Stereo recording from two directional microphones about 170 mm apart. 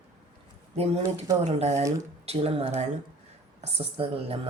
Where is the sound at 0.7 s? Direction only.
35° right (ahead or behind).